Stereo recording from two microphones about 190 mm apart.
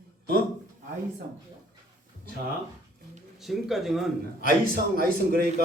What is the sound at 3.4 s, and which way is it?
Speech, centre (ahead or behind).